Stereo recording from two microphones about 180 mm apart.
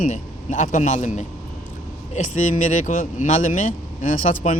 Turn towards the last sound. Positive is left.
turn(degrees=45)  # may be behind; listen again after turning